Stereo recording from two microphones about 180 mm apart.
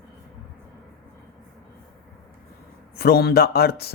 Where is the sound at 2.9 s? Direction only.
60° left (ahead or behind).